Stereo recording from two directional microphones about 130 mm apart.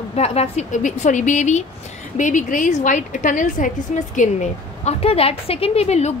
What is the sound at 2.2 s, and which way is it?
A woman's voice, 80° left.